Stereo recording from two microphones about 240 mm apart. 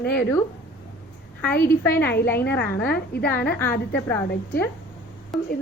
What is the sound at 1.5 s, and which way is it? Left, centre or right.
Speech, left.